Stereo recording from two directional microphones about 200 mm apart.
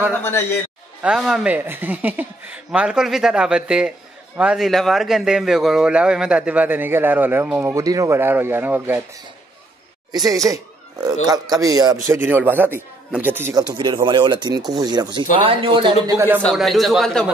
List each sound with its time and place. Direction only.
0.2 s a man's voice: 10° left (ahead or behind)
1.0 s a man's voice: centre (ahead or behind)
10.1 s a man's voice: 15° right (ahead or behind)
16.1 s a man's voice: 15° right (ahead or behind)
16.3 s speech: centre (ahead or behind)